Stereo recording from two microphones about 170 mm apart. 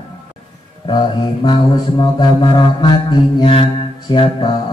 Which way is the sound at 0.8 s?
30° left (ahead or behind).